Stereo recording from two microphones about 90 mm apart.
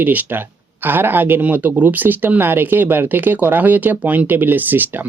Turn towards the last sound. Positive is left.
turn(degrees=-20)  # may be behind; listen again after turning